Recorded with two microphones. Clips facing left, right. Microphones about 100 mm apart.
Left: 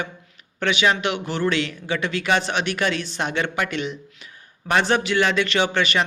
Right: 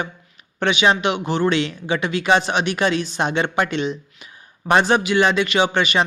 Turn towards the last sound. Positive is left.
turn(degrees=-15)  # may be behind; listen again after turning